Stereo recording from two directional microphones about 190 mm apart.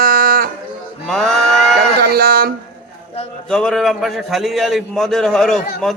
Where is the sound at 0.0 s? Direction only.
50° right (ahead or behind).